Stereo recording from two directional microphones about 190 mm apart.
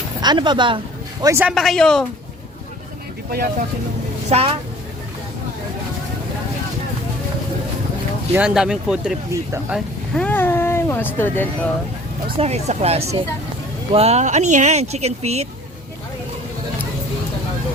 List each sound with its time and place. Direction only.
0.2 s speech: 25° right (ahead or behind)
1.2 s speech: 15° right (ahead or behind)
1.5 s speech: centre (ahead or behind)
4.3 s speech: 30° right (ahead or behind)
8.3 s speech: 5° right (ahead or behind)
9.3 s speech: 15° right (ahead or behind)
9.7 s speech: 5° left (ahead or behind)
12.4 s speech: 35° right (ahead or behind)